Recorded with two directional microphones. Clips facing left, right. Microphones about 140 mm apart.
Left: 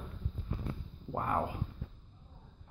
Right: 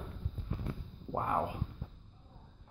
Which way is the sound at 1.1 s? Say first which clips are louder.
Even; 15° right (ahead or behind).